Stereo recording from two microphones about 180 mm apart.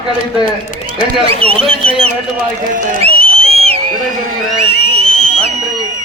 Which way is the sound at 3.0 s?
35° right (ahead or behind).